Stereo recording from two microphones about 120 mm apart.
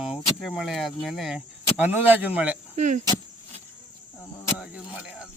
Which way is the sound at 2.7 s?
90° right.